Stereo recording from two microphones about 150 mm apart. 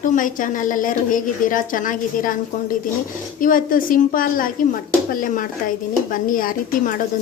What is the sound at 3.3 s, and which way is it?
A woman's voice, 65° left (ahead or behind).